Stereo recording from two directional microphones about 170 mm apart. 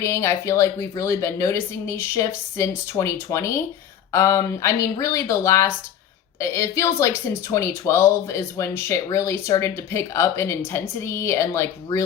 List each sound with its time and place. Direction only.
0.0 s speech: 15° left (ahead or behind)